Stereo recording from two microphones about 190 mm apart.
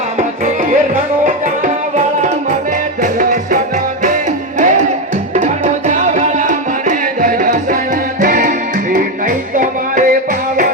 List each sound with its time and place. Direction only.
3.0 s music: 45° right (ahead or behind)